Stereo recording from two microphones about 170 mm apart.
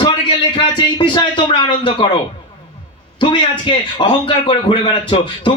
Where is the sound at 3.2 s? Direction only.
30° left (ahead or behind).